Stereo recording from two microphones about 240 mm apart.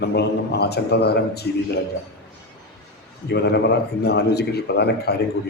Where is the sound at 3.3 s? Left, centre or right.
Left.